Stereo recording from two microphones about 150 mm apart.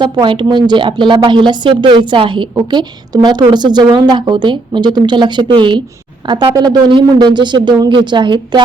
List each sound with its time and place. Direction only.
0.0 s a woman's voice: 30° right (ahead or behind)